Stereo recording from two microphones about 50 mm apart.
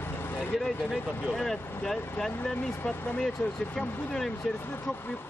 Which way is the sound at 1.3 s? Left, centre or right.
Centre.